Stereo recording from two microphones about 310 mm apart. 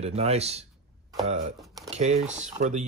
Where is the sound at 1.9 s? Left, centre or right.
Centre.